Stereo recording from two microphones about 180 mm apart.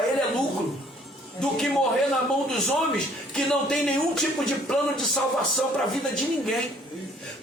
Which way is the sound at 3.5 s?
Centre (ahead or behind).